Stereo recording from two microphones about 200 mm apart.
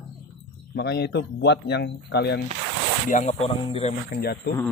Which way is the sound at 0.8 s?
55° left (ahead or behind).